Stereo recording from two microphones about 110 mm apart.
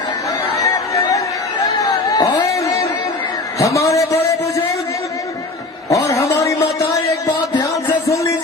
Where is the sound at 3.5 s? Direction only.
30° left (ahead or behind).